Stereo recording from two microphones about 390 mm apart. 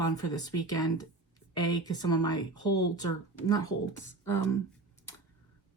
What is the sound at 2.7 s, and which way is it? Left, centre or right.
Speech, left.